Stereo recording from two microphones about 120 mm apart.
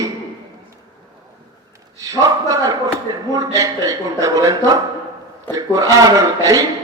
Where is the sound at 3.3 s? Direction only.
30° right (ahead or behind).